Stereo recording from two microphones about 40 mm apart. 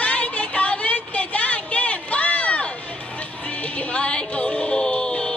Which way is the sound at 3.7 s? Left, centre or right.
Left.